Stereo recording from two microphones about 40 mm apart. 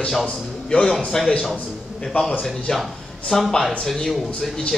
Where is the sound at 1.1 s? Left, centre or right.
Centre.